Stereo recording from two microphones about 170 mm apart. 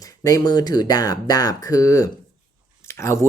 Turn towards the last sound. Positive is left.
turn(degrees=15)  # may be behind; listen again after turning